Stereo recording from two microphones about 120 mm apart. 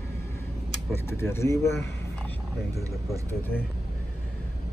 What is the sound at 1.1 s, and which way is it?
Speech, 20° left (ahead or behind).